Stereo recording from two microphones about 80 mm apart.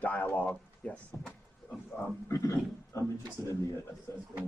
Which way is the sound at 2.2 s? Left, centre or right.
Left.